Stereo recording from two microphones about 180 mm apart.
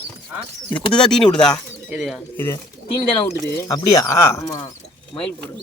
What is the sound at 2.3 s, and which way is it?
Speech, 15° left (ahead or behind).